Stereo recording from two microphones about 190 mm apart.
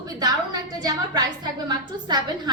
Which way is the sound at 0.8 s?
20° right (ahead or behind).